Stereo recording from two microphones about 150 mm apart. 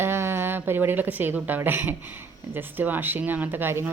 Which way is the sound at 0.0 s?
15° right (ahead or behind).